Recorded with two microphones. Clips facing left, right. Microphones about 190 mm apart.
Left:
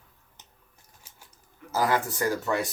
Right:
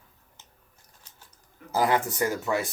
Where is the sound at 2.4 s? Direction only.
5° right (ahead or behind).